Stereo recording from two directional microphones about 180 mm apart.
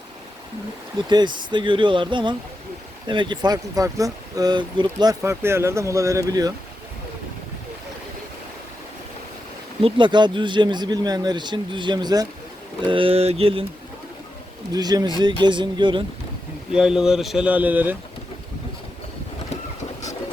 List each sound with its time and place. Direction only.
1.0 s speech: 25° right (ahead or behind)
9.8 s speech: 25° right (ahead or behind)
14.7 s speech: 20° right (ahead or behind)
16.7 s speech: 5° right (ahead or behind)